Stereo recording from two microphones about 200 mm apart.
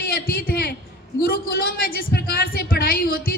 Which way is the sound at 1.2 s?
45° left (ahead or behind).